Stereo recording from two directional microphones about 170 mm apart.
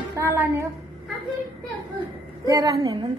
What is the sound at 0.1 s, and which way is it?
Speech, 15° right (ahead or behind).